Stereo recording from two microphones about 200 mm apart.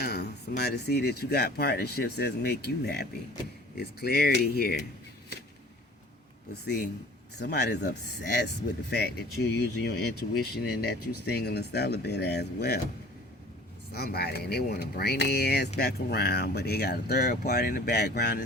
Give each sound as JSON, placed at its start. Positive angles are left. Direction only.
{"t": 0.0, "sound": "speech", "side_deg": 50}
{"t": 7.3, "sound": "speech", "side_deg": 55}
{"t": 13.9, "sound": "speech", "side_deg": 55}